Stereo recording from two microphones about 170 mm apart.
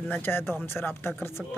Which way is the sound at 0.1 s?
10° left (ahead or behind).